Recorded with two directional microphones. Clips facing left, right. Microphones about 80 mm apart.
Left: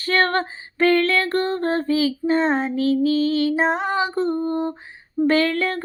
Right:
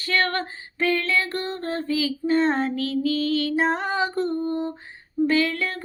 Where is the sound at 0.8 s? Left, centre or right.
Left.